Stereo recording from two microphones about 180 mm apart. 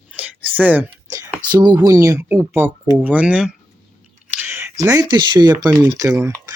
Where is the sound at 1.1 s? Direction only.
25° right (ahead or behind).